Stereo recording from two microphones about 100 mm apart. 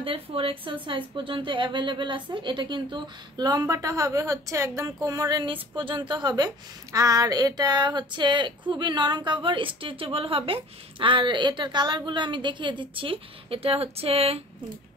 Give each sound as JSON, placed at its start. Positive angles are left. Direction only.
{"t": 0.0, "sound": "a woman's voice", "side_deg": -65}
{"t": 5.4, "sound": "speech", "side_deg": -55}